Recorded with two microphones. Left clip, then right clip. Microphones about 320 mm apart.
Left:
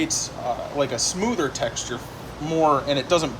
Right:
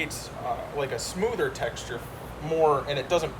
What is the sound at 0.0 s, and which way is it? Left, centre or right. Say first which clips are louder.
Speech: left 6 dB; centre.